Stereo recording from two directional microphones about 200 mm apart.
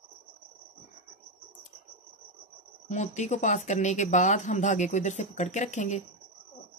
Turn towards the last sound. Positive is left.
turn(degrees=35)  # may be behind; listen again after turning